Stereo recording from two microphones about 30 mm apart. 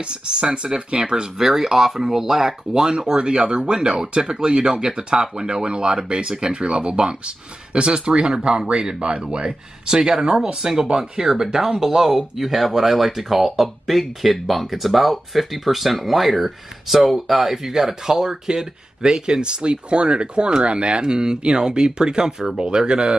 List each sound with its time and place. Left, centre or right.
0.0 s speech: right
1.4 s speech: centre; by 8.3 s right
9.3 s speech: right
10.4 s speech: centre